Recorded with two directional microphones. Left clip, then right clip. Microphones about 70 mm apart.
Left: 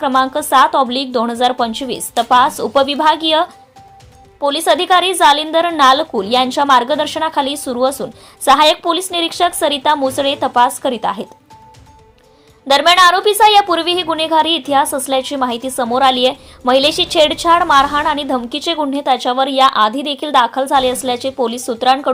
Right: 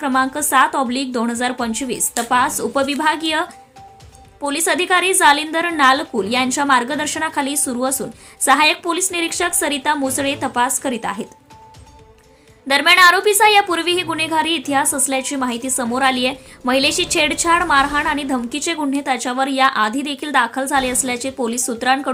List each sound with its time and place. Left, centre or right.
0.0 s a woman's voice: left
10.0 s speech: left
10.2 s a woman's voice: left
12.6 s a woman's voice: left